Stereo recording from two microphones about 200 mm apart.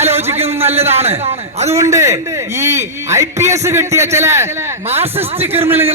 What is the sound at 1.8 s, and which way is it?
A man's voice, 15° right (ahead or behind).